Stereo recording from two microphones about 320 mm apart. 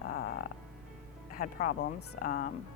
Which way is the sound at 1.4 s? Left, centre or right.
Left.